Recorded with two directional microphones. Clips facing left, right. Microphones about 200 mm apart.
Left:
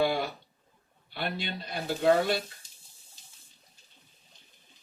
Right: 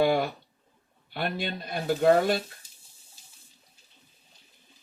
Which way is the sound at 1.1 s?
50° right (ahead or behind).